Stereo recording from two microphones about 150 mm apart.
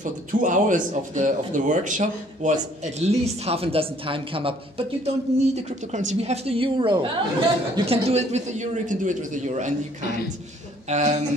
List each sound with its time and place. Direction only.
0.0 s speech: 60° right (ahead or behind)